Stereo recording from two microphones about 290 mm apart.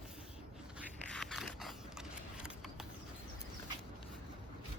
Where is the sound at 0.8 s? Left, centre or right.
Centre.